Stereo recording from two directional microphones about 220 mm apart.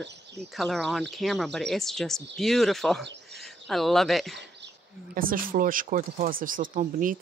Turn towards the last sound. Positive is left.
turn(degrees=-35)  # may be behind; listen again after turning